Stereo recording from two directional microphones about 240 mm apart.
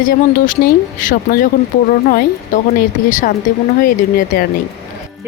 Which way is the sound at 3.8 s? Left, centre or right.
Left.